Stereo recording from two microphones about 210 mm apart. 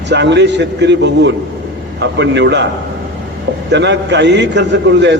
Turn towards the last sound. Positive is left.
turn(degrees=-55)  # may be behind; listen again after turning